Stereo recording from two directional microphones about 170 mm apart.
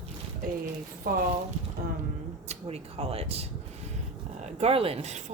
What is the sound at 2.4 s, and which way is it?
A woman's voice, 35° right (ahead or behind).